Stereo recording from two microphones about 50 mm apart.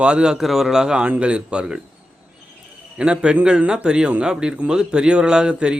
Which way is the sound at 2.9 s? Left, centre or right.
Right.